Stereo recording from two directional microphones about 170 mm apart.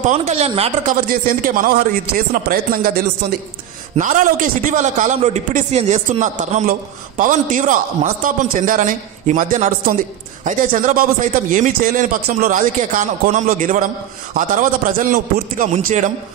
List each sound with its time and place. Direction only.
0.0 s a man's voice: 45° right (ahead or behind)
1.0 s speech: 55° right (ahead or behind)
3.2 s a man's voice: 70° right (ahead or behind)
3.9 s a man's voice: 45° right (ahead or behind)